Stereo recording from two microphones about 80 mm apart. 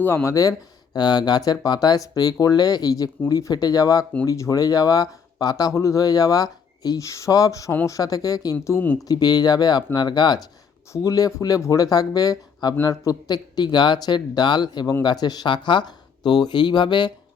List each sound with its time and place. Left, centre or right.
0.0 s speech: left
0.9 s speech: left
10.9 s speech: left